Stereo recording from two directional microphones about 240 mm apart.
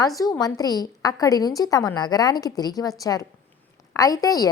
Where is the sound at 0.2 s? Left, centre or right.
Centre.